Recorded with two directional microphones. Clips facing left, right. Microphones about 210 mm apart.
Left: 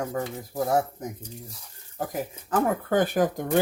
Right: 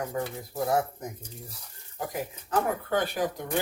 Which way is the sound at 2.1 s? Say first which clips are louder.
Left 2 dB; 50° left (ahead or behind).